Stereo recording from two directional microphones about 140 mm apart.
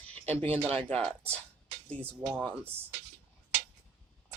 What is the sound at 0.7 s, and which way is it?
Speech, 10° left (ahead or behind).